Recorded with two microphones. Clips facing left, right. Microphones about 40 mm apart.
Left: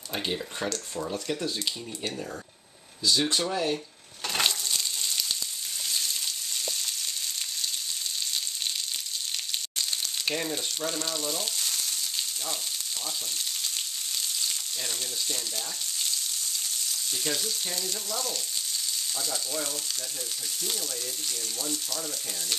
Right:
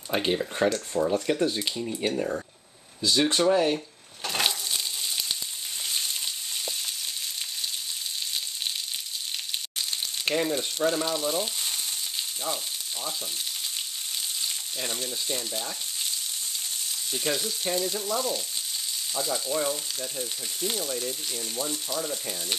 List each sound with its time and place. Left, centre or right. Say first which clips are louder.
0.1 s speech: right 6 dB; right
4.2 s crushing: even; centre
4.5 s crushing: even; centre
10.2 s frying: right 6 dB; centre
14.4 s frying: right 1 dB; centre
17.1 s frying: right 3 dB; centre
21.5 s speech: right 6 dB; centre